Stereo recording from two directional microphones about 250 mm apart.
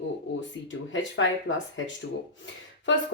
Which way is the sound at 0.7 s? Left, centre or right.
Left.